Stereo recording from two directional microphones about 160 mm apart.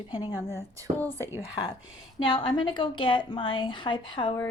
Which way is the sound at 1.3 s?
20° left (ahead or behind).